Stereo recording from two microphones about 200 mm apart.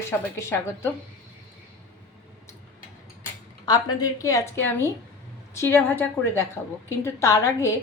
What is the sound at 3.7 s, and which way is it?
A woman's voice, 20° left (ahead or behind).